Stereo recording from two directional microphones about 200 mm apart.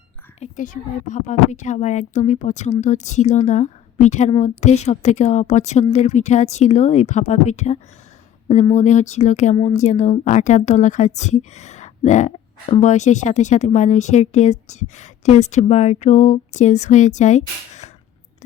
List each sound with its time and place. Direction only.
0.3 s speech: 35° left (ahead or behind)